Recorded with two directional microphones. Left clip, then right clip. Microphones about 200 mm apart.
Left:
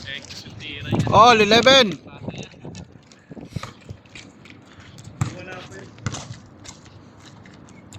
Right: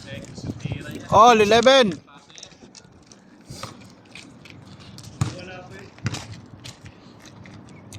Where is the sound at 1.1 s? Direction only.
5° right (ahead or behind).